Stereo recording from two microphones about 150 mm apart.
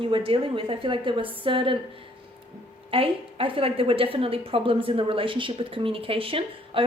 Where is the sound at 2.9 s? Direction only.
35° right (ahead or behind).